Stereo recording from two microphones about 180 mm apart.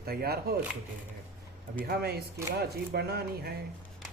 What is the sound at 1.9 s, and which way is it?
Speech, 60° right (ahead or behind).